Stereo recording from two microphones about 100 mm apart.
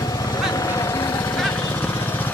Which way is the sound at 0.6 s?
35° left (ahead or behind).